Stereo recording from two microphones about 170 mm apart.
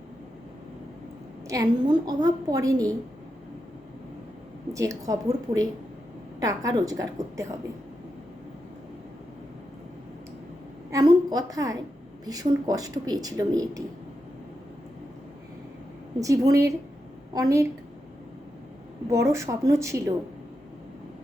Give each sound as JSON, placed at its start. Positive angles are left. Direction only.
{"t": 1.5, "sound": "a woman's voice", "side_deg": -20}
{"t": 4.7, "sound": "speech", "side_deg": -20}
{"t": 6.4, "sound": "speech", "side_deg": -20}
{"t": 10.9, "sound": "a woman's voice", "side_deg": -25}
{"t": 16.2, "sound": "speech", "side_deg": -20}
{"t": 19.0, "sound": "speech", "side_deg": -20}